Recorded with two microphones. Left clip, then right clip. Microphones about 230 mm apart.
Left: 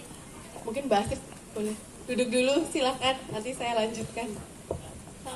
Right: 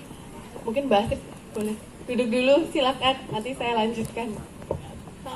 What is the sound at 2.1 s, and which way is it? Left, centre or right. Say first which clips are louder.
A woman's voice: right 5 dB; left.